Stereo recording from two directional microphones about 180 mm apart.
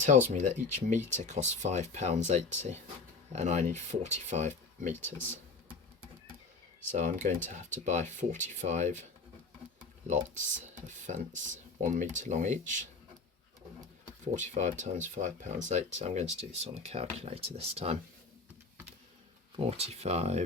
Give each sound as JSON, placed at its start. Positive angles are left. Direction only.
{"t": 0.3, "sound": "speech", "side_deg": -40}
{"t": 6.9, "sound": "speech", "side_deg": -45}
{"t": 10.1, "sound": "speech", "side_deg": -45}
{"t": 14.3, "sound": "speech", "side_deg": -40}
{"t": 19.5, "sound": "speech", "side_deg": -35}